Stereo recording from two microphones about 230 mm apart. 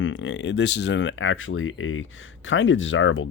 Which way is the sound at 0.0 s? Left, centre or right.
Left.